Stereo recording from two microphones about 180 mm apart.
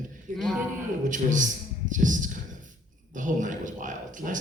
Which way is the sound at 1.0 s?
45° right (ahead or behind).